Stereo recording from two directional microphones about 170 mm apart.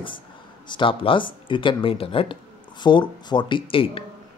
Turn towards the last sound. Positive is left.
turn(degrees=30)  # may be behind; listen again after turning